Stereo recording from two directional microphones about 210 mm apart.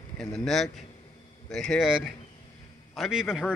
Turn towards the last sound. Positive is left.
turn(degrees=0)  # may be behind; listen again after turning